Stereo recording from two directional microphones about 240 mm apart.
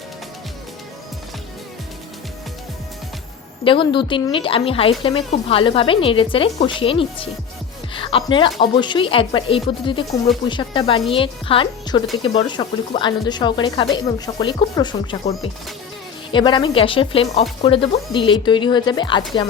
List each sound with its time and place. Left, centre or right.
3.6 s a woman's voice: left